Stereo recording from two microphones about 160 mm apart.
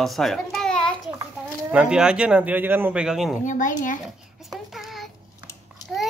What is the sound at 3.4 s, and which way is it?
Speech, 50° left (ahead or behind).